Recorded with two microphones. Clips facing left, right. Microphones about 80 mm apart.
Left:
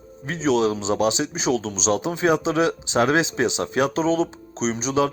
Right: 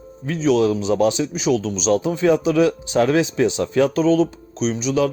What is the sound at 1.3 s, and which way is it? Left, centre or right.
Speech, left.